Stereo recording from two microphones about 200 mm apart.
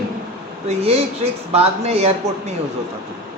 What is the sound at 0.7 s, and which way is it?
Speech, 30° right (ahead or behind).